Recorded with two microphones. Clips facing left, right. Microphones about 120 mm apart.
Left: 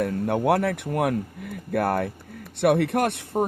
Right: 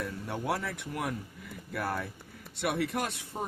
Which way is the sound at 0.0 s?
60° left (ahead or behind).